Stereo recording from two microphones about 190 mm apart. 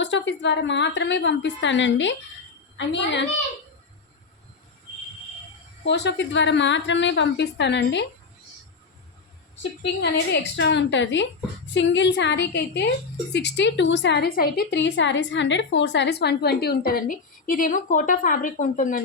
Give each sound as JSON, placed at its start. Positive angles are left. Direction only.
{"t": 0.0, "sound": "a woman's voice", "side_deg": 75}
{"t": 5.8, "sound": "a woman's voice", "side_deg": 65}
{"t": 10.5, "sound": "a woman's voice", "side_deg": 70}